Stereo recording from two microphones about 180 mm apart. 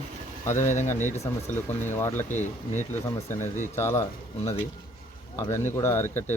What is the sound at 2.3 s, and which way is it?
Speech, 40° left (ahead or behind).